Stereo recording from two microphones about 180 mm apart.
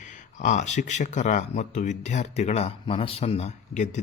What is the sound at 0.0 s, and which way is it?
A man's voice, 40° left (ahead or behind).